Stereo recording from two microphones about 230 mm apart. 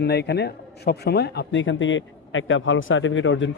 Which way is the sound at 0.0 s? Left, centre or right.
Left.